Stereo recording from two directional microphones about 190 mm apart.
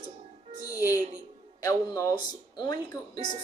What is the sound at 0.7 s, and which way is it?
Music, 15° left (ahead or behind).